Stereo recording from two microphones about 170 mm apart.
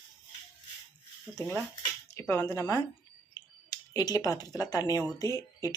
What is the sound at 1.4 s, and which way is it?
A woman's voice, 5° left (ahead or behind).